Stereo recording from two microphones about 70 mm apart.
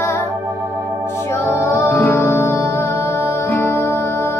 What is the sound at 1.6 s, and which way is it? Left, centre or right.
Music, left.